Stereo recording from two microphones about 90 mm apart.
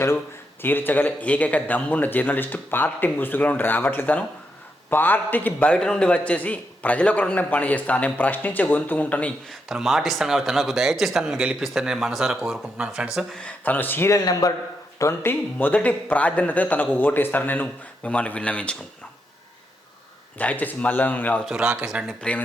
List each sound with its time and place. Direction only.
0.6 s a man's voice: 20° left (ahead or behind)
9.5 s speech: 5° right (ahead or behind)
13.3 s a man's voice: 15° left (ahead or behind)
14.1 s a man's voice: 40° left (ahead or behind)
14.9 s a man's voice: 30° left (ahead or behind); by 18.8 s 10° left (ahead or behind)
20.4 s a man's voice: 15° left (ahead or behind)
21.4 s speech: 5° right (ahead or behind)
22.0 s a man's voice: 10° left (ahead or behind)